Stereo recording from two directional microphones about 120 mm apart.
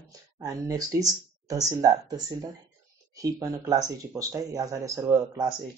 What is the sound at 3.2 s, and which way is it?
Speech, 30° right (ahead or behind).